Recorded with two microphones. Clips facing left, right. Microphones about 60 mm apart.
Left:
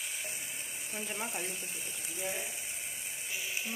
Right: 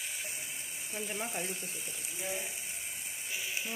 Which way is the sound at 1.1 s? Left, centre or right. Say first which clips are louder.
Right 1 dB; left.